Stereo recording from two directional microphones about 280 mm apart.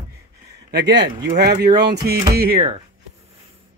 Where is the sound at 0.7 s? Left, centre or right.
Right.